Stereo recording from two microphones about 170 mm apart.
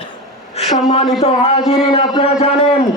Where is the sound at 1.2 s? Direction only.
35° left (ahead or behind).